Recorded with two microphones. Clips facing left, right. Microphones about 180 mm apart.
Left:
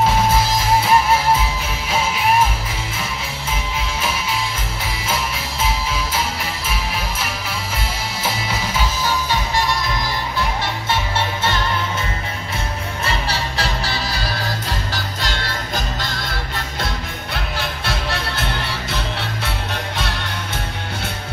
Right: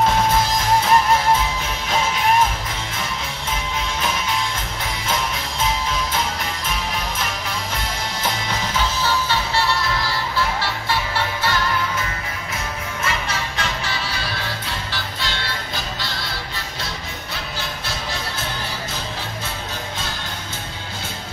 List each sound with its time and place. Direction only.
0.0 s music: 5° left (ahead or behind)
4.0 s music: 5° left (ahead or behind)
7.7 s music: 5° left (ahead or behind); by 11.6 s 20° left (ahead or behind)
13.0 s music: 35° left (ahead or behind); by 20.2 s 65° left (ahead or behind)